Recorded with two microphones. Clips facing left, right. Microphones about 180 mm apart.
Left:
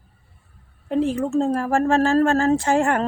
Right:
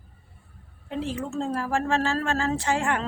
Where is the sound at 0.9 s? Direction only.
50° left (ahead or behind).